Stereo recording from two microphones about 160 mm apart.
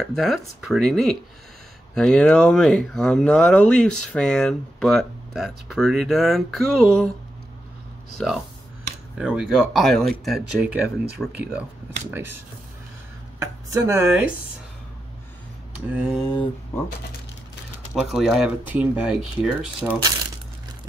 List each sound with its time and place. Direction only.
0.0 s speech: centre (ahead or behind)
8.2 s speech: 5° left (ahead or behind); by 12.4 s 15° right (ahead or behind)
13.7 s speech: 15° right (ahead or behind)
15.9 s speech: 5° right (ahead or behind)
18.1 s speech: centre (ahead or behind)